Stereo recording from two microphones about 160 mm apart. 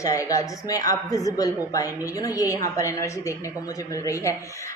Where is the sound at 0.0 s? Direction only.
20° left (ahead or behind).